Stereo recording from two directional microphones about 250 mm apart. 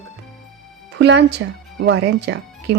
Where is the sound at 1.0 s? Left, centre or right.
Right.